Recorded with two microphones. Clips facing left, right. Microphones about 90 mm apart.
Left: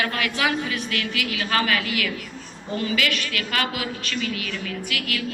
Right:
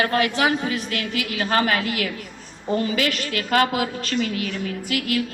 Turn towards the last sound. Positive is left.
turn(degrees=-35)  # may be behind; listen again after turning